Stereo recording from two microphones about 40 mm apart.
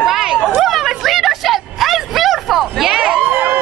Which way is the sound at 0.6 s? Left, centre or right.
Centre.